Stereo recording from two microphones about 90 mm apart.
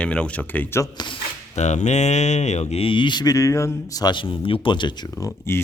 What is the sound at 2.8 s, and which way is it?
Speech, 65° left (ahead or behind).